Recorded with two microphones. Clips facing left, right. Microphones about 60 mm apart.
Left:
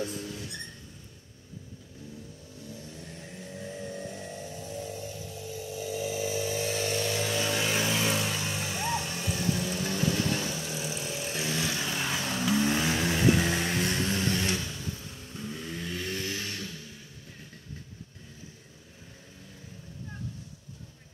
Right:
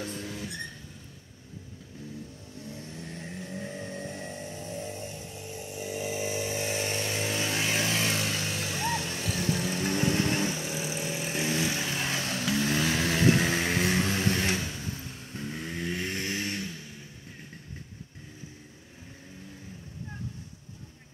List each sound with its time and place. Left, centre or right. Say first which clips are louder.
2.7 s vehicle: right 3 dB; right; by 7.4 s centre
7.4 s vehicle: left 1 dB; centre
9.4 s vehicle: right 1 dB; centre
9.8 s vehicle: right 2 dB; right; by 13.7 s centre
13.7 s vehicle: right 3 dB; centre
14.1 s a sound: right 1 dB; right
15.3 s vehicle: right 2 dB; right